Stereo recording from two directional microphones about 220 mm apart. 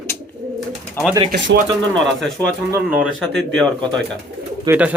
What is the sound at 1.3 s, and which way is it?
Speech, 50° right (ahead or behind).